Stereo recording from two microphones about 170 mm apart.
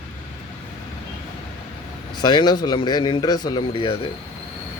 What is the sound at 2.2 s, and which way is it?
Speech, 25° left (ahead or behind).